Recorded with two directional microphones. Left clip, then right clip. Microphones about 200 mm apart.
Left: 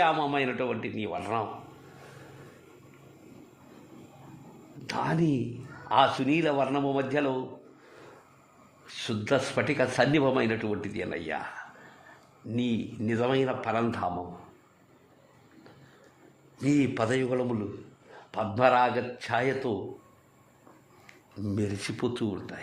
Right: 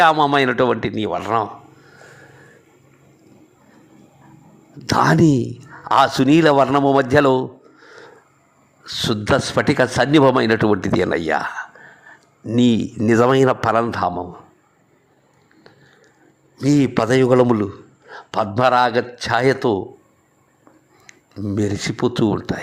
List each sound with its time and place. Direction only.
0.0 s a man's voice: 35° right (ahead or behind)
4.9 s a man's voice: 35° right (ahead or behind)
8.9 s a man's voice: 35° right (ahead or behind)
12.5 s a man's voice: 40° right (ahead or behind)
13.8 s a man's voice: 25° right (ahead or behind)
16.6 s a man's voice: 25° right (ahead or behind)
21.1 s a man's voice: 20° right (ahead or behind)